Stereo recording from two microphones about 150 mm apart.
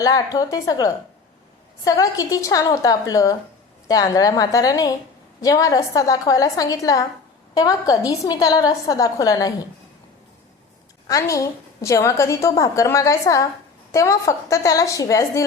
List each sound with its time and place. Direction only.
0.0 s a woman's voice: 25° left (ahead or behind)
11.1 s a woman's voice: 20° left (ahead or behind)